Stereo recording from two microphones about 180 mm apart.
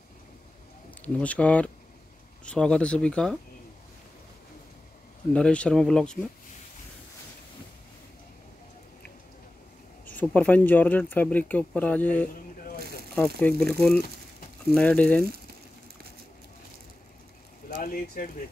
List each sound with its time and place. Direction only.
1.0 s speech: 10° left (ahead or behind)
5.3 s speech: 5° left (ahead or behind)
10.1 s speech: 10° left (ahead or behind)
13.4 s speech: 5° left (ahead or behind)
17.6 s speech: 50° left (ahead or behind)